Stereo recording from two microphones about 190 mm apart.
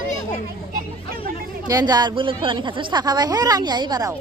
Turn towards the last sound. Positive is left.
turn(degrees=-20)  # may be behind; listen again after turning